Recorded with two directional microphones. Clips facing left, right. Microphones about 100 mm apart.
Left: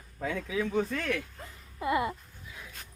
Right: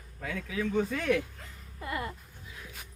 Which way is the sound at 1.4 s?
15° left (ahead or behind).